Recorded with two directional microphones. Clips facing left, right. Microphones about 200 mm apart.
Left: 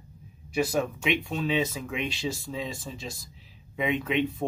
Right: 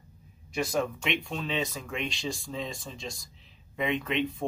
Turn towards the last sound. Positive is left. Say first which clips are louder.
# left 3 dB
turn(degrees=5)  # may be behind; listen again after turning